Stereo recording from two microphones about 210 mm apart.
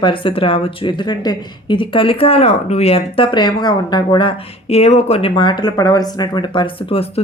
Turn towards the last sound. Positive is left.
turn(degrees=25)  # may be behind; listen again after turning